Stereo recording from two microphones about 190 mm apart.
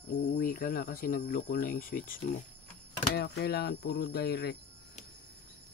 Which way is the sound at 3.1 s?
55° left (ahead or behind).